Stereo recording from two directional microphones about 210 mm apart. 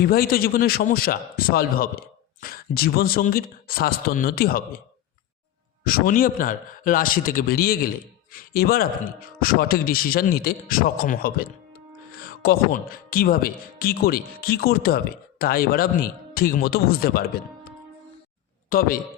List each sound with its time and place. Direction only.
0.0 s speech: 45° left (ahead or behind)
5.8 s speech: 45° left (ahead or behind)
18.7 s speech: 45° left (ahead or behind)